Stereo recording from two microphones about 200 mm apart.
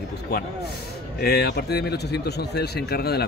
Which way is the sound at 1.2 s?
55° left (ahead or behind).